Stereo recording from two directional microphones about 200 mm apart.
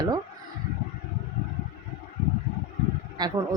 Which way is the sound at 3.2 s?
20° right (ahead or behind).